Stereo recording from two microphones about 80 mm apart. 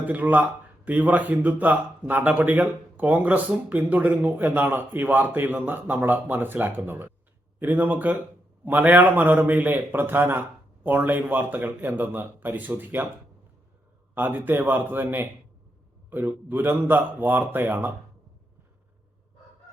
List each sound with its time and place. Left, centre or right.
0.0 s speech: centre
14.2 s speech: right